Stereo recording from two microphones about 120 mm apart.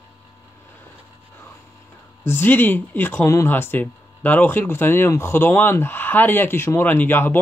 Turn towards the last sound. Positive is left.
turn(degrees=15)  # may be behind; listen again after turning